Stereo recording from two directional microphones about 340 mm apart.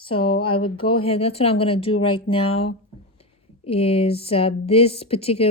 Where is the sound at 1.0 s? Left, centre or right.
Centre.